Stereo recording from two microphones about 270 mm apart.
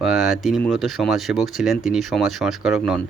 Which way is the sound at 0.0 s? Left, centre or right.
Centre.